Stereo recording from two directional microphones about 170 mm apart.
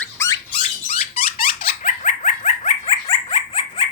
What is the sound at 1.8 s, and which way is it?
Dog, 45° left (ahead or behind).